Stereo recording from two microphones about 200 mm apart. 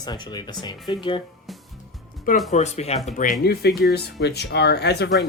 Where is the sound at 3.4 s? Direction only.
50° left (ahead or behind).